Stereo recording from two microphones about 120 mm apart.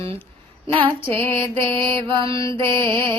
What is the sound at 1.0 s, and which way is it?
Music, 20° left (ahead or behind).